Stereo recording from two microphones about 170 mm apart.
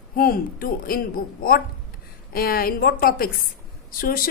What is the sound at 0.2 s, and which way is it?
A woman's voice, 60° left (ahead or behind).